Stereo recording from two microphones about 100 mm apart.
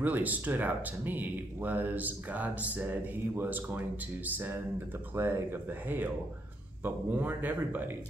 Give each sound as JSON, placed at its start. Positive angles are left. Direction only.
{"t": 0.0, "sound": "speech", "side_deg": -15}
{"t": 5.1, "sound": "speech", "side_deg": -20}